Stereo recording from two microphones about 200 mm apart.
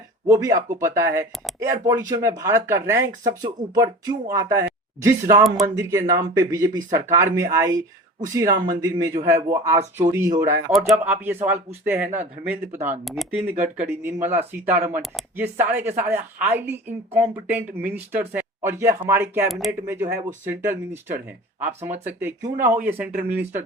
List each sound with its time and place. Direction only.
0.3 s speech: 15° right (ahead or behind)
5.6 s speech: 15° right (ahead or behind)
10.7 s speech: centre (ahead or behind)
19.5 s speech: centre (ahead or behind)
19.9 s speech: 10° right (ahead or behind)